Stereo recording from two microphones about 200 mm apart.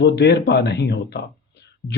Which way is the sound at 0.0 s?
55° left (ahead or behind).